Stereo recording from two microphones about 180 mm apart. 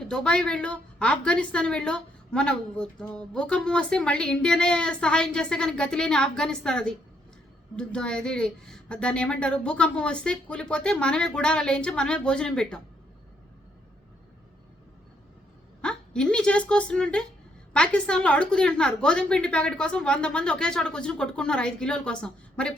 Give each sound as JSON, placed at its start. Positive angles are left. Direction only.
{"t": 0.1, "sound": "a woman's voice", "side_deg": 5}
{"t": 15.8, "sound": "a woman's voice", "side_deg": 5}